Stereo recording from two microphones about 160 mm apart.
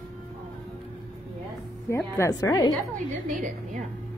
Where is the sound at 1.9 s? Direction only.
15° left (ahead or behind).